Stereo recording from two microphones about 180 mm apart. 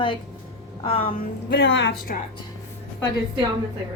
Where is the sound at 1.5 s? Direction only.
80° left.